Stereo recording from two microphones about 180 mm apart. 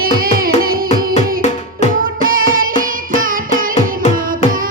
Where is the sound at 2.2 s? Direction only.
50° right (ahead or behind).